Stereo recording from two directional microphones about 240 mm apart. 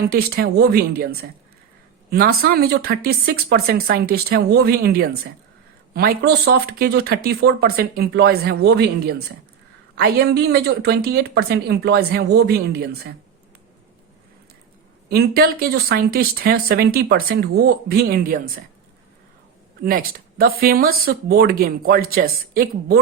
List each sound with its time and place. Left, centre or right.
0.1 s speech: right
15.1 s speech: right
19.8 s speech: right